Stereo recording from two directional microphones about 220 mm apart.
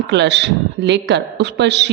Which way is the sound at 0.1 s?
50° right (ahead or behind).